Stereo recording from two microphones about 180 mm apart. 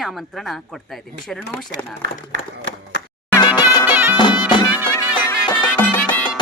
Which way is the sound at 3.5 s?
10° right (ahead or behind).